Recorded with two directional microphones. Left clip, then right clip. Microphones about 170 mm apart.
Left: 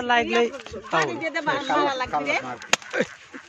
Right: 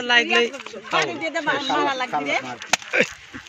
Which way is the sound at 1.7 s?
35° right (ahead or behind).